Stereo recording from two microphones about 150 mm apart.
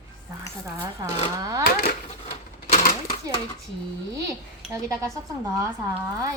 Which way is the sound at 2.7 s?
70° left (ahead or behind).